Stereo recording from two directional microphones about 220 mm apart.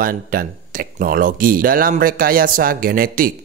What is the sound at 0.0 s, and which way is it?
Speech, 40° right (ahead or behind).